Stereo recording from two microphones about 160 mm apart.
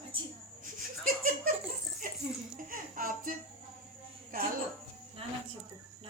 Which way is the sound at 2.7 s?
60° right (ahead or behind).